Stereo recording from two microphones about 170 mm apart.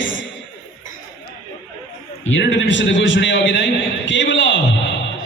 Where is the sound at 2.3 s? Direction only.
90° left.